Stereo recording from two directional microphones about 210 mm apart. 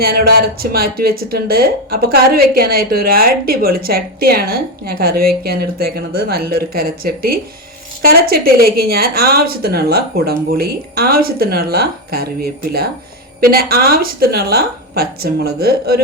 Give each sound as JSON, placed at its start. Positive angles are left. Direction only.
{"t": 0.0, "sound": "speech", "side_deg": -45}